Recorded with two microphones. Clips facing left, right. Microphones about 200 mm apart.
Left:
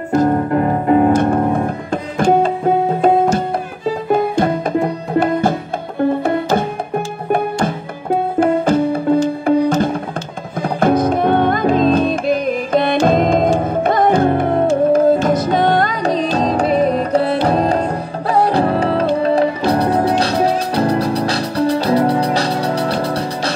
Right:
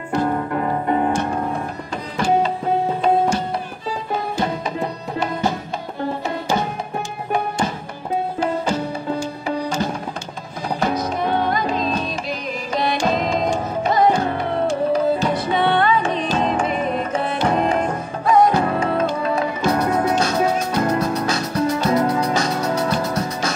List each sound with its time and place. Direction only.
0.1 s music: 45° left (ahead or behind)
3.3 s music: 50° left (ahead or behind)
8.4 s music: 55° left (ahead or behind)
9.6 s tabla: 55° left (ahead or behind)
10.6 s music: 55° left (ahead or behind); by 23.5 s 35° left (ahead or behind)